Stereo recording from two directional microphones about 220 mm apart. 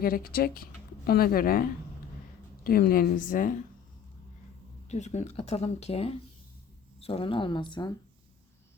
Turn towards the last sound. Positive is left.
turn(degrees=20)  # may be behind; listen again after turning